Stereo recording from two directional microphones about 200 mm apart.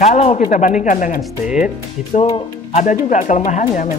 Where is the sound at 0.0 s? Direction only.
35° left (ahead or behind).